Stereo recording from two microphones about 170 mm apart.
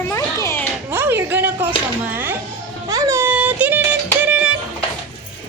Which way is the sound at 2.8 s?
20° right (ahead or behind).